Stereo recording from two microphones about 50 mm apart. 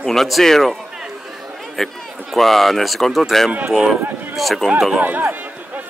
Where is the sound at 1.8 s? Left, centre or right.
Centre.